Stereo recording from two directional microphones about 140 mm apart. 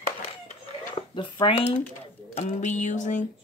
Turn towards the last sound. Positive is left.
turn(degrees=60)  # may be behind; listen again after turning